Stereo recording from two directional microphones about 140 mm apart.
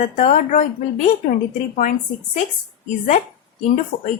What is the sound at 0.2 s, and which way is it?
Speech, 60° left (ahead or behind).